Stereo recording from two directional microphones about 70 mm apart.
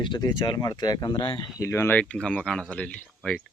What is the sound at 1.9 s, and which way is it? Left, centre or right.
Speech, centre.